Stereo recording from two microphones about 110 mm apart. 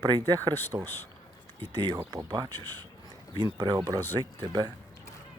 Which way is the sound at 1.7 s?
50° right (ahead or behind).